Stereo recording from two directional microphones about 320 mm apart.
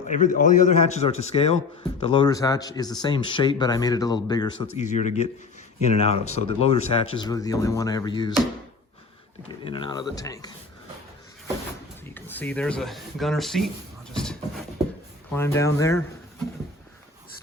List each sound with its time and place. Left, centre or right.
0.1 s a man's voice: left
9.6 s speech: centre
12.0 s speech: centre
14.1 s a sound: centre
15.3 s speech: centre